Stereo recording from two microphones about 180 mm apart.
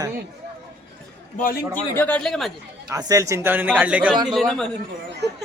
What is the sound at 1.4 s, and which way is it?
Speech, 50° left (ahead or behind).